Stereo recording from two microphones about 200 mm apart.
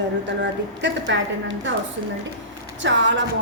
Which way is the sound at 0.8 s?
65° right (ahead or behind).